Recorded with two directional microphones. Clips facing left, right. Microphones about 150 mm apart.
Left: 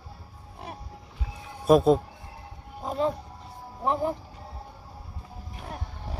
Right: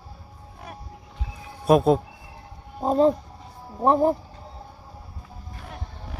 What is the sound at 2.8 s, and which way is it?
Speech, 35° right (ahead or behind).